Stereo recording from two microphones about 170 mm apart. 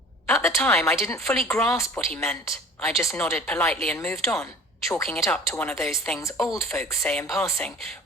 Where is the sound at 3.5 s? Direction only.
5° left (ahead or behind).